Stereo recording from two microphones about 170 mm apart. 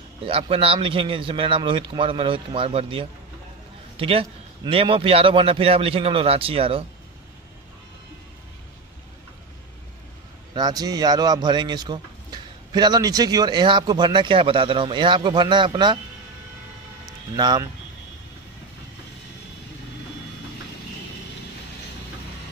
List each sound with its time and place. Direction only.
0.3 s a man's voice: 35° right (ahead or behind)
10.5 s speech: 25° right (ahead or behind)
17.4 s speech: 25° right (ahead or behind)